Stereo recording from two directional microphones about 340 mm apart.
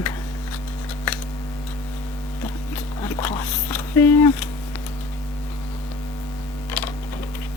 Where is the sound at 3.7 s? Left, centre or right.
Centre.